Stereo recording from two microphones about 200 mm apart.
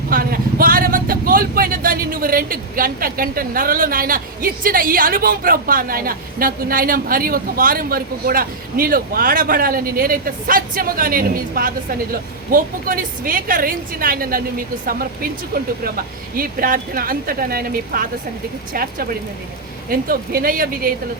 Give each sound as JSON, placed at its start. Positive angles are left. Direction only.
{"t": 0.1, "sound": "speech", "side_deg": -45}